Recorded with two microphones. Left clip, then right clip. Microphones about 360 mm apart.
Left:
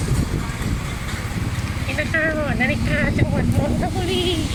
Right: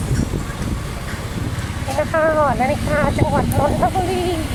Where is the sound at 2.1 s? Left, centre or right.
Right.